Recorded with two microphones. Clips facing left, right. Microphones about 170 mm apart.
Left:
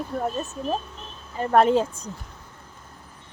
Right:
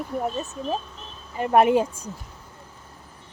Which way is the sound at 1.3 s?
15° right (ahead or behind).